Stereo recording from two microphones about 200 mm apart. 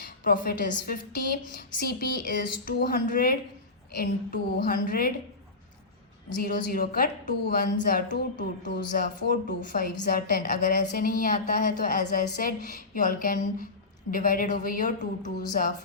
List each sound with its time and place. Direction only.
0.3 s a woman's voice: 45° left (ahead or behind)
6.4 s a woman's voice: 50° left (ahead or behind)